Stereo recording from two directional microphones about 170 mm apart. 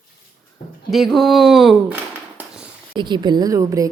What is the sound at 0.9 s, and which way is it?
Speech, centre (ahead or behind).